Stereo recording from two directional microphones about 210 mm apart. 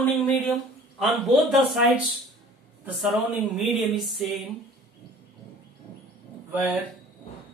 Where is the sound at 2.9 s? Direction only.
Centre (ahead or behind).